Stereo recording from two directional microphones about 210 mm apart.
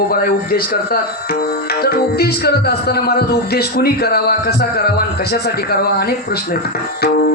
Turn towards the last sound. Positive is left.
turn(degrees=50)  # may be behind; listen again after turning